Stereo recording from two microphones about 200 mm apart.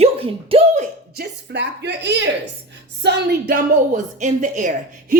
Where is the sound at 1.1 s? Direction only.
55° right (ahead or behind).